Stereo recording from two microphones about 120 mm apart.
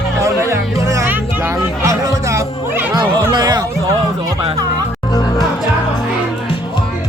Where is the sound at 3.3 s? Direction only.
35° right (ahead or behind).